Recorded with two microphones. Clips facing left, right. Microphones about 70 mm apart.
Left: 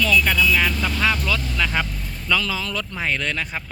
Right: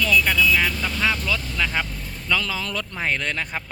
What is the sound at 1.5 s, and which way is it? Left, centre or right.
Speech, centre.